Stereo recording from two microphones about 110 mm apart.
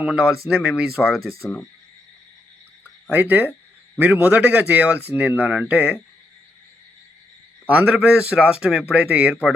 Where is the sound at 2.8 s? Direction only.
15° right (ahead or behind).